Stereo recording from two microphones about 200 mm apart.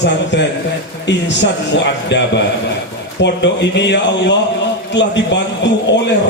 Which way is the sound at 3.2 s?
60° left (ahead or behind).